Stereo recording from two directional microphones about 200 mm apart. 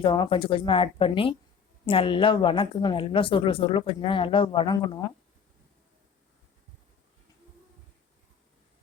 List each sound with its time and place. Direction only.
0.0 s a woman's voice: 25° left (ahead or behind)